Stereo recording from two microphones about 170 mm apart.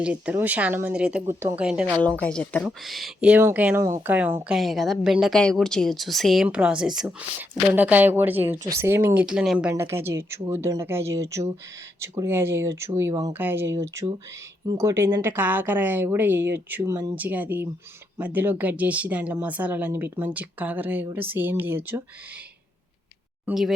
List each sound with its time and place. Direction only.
0.0 s speech: 10° right (ahead or behind)
2.0 s speech: 10° left (ahead or behind); by 4.5 s 10° right (ahead or behind)
4.5 s a woman's voice: centre (ahead or behind)
23.5 s a woman's voice: centre (ahead or behind)